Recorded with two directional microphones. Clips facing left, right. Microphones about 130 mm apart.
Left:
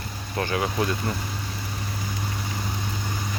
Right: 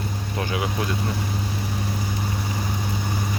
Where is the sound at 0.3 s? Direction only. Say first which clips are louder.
Left 2 dB; 10° right (ahead or behind).